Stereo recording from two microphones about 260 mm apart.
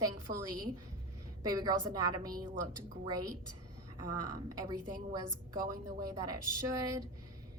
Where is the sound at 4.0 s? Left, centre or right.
Right.